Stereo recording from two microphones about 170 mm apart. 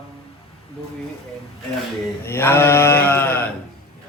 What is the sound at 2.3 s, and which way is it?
Sheep, 10° left (ahead or behind).